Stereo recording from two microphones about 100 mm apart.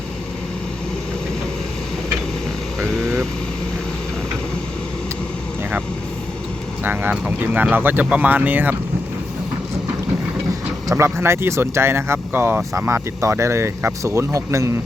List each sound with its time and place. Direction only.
6.8 s speech: 20° right (ahead or behind)
10.9 s speech: 25° right (ahead or behind)